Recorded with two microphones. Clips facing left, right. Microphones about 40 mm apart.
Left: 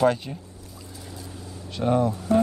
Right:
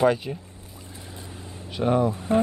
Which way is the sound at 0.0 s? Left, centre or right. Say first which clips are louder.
Even; centre.